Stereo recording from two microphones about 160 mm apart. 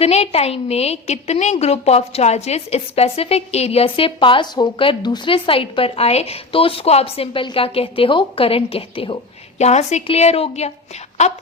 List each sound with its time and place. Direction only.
0.0 s a woman's voice: 40° left (ahead or behind)